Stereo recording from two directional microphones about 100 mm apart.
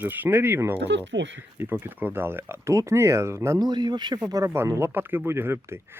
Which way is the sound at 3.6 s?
45° right (ahead or behind).